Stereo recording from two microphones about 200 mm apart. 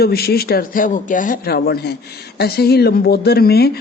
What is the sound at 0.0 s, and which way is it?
A man's voice, 50° left (ahead or behind).